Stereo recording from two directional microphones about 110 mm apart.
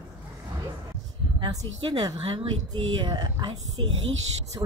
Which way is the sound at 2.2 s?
60° right (ahead or behind).